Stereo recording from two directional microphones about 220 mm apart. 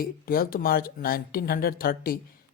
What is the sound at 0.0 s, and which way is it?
Speech, 40° left (ahead or behind).